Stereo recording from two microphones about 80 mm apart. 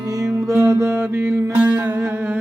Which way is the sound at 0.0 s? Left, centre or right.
Right.